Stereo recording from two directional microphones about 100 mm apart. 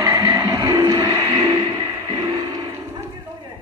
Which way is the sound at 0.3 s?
35° right (ahead or behind).